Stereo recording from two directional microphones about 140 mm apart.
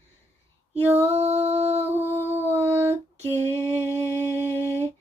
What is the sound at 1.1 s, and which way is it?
Music, 50° right (ahead or behind).